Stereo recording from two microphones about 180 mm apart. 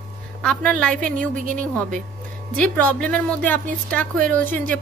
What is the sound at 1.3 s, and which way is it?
Speech, 45° right (ahead or behind).